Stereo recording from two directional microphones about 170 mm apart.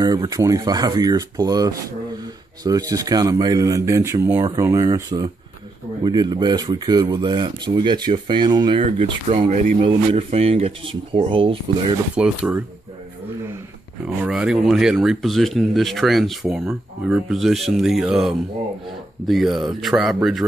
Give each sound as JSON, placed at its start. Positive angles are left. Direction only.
{"t": 0.0, "sound": "speech", "side_deg": -25}
{"t": 6.0, "sound": "speech", "side_deg": -25}
{"t": 9.8, "sound": "speech", "side_deg": -35}
{"t": 12.2, "sound": "speech", "side_deg": -5}
{"t": 14.0, "sound": "speech", "side_deg": -5}